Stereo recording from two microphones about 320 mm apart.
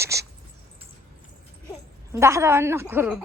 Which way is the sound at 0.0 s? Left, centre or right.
Centre.